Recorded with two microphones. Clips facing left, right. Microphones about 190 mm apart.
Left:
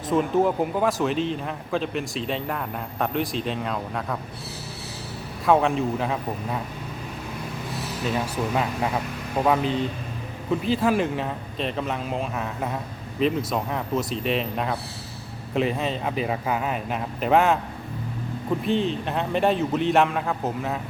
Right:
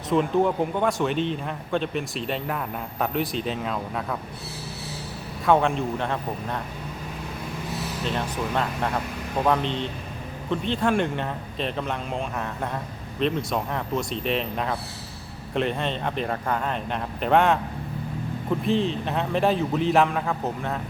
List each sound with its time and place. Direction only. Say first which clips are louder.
0.1 s speech: even; centre (ahead or behind)
5.5 s speech: left 1 dB; centre (ahead or behind)
8.0 s speech: left 3 dB; 5° left (ahead or behind)
18.6 s speech: right 1 dB; centre (ahead or behind)